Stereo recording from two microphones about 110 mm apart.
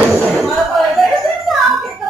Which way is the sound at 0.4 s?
Centre (ahead or behind).